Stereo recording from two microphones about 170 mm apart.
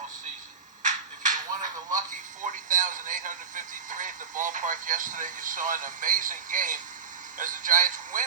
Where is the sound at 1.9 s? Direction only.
50° right (ahead or behind).